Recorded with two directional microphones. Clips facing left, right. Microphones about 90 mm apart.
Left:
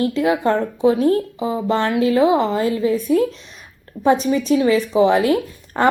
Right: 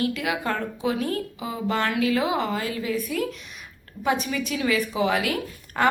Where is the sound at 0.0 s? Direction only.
30° left (ahead or behind).